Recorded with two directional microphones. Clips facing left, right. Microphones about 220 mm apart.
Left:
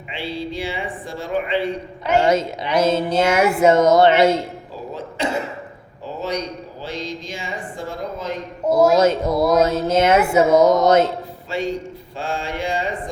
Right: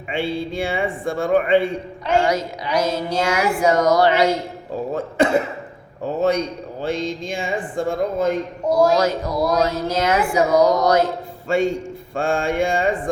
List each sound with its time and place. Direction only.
0.1 s speech: 55° right (ahead or behind)
2.2 s speech: 25° left (ahead or behind)
6.8 s speech: 50° right (ahead or behind)
8.6 s speech: 5° left (ahead or behind)
9.0 s speech: 25° left (ahead or behind)
11.4 s a man's voice: 50° right (ahead or behind)